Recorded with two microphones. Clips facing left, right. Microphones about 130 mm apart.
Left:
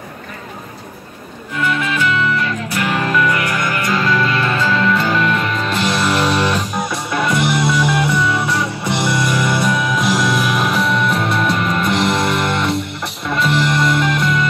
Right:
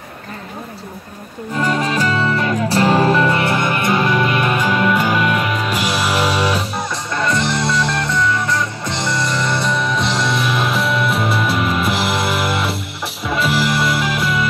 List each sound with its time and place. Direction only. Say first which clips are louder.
1.6 s music: right 1 dB; 35° right (ahead or behind); by 8.1 s 5° left (ahead or behind)
9.3 s music: left 2 dB; 5° left (ahead or behind)